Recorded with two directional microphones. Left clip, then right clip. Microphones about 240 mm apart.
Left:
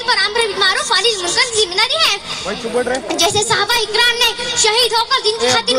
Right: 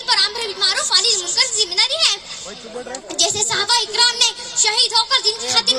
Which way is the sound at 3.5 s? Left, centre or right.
Right.